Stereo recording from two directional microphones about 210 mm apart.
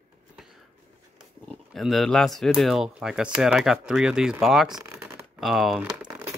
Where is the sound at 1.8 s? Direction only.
Centre (ahead or behind).